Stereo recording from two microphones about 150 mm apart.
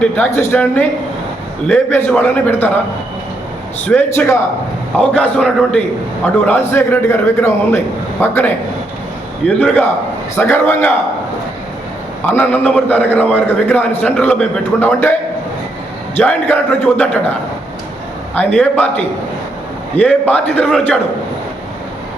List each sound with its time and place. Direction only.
0.0 s a man's voice: 15° left (ahead or behind)
3.8 s a man's voice: 10° left (ahead or behind)
12.2 s a man's voice: 15° left (ahead or behind)
16.1 s a man's voice: 10° left (ahead or behind)
18.3 s a man's voice: 10° left (ahead or behind)